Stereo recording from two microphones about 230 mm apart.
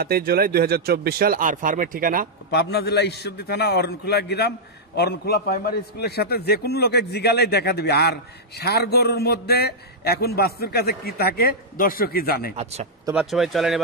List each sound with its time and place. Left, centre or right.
0.0 s speech: right
2.5 s a man's voice: left
13.0 s speech: centre